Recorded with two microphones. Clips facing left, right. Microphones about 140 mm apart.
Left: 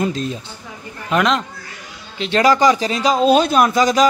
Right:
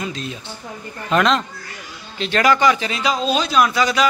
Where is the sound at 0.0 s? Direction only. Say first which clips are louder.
Left 7 dB; 40° left (ahead or behind).